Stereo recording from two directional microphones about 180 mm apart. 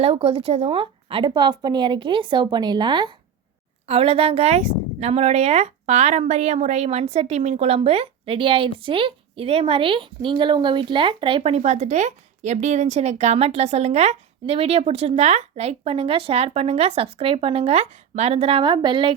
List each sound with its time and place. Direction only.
0.0 s a woman's voice: 30° right (ahead or behind)